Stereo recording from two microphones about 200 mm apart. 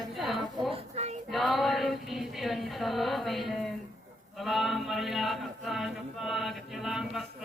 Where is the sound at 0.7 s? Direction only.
30° right (ahead or behind).